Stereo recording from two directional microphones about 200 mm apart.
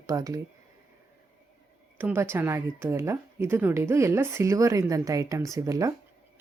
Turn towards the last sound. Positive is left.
turn(degrees=-15)  # may be behind; listen again after turning